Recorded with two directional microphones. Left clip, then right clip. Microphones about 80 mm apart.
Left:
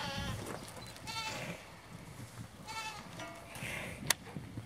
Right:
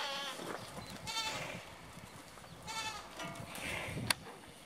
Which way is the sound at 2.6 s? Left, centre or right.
Centre.